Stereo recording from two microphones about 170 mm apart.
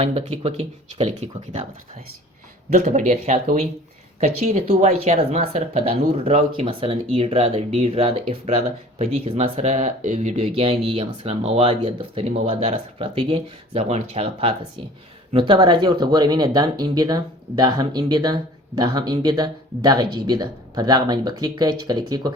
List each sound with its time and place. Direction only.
0.0 s speech: 35° right (ahead or behind)
2.7 s speech: 45° right (ahead or behind); by 22.3 s 25° right (ahead or behind)